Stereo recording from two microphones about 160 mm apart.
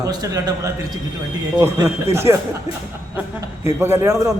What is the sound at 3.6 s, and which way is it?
Speech, 15° right (ahead or behind).